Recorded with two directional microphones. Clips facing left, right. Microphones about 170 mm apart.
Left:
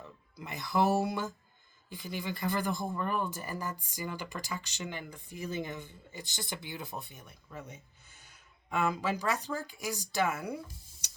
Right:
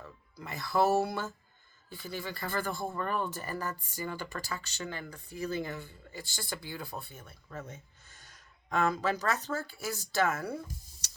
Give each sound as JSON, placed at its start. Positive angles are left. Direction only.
{"t": 0.3, "sound": "speech", "side_deg": 20}